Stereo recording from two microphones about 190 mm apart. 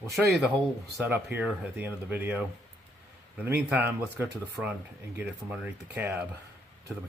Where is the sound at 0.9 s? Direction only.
10° right (ahead or behind).